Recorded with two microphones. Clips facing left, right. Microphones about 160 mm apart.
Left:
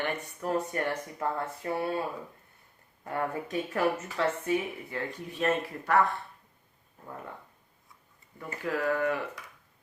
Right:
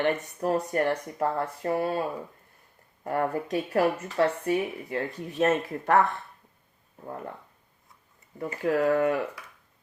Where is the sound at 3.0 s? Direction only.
40° right (ahead or behind).